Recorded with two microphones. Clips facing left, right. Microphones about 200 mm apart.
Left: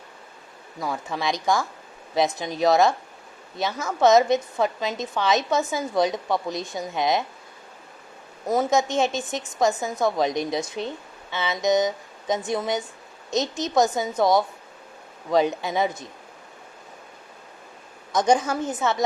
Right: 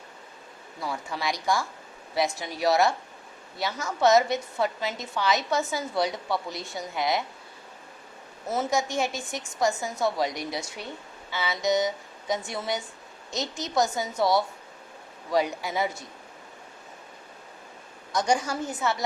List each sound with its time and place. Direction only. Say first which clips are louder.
1.2 s a woman's voice: left 4 dB; 20° left (ahead or behind)
8.4 s a woman's voice: left 5 dB; 20° left (ahead or behind)
18.1 s a woman's voice: left 5 dB; 20° left (ahead or behind)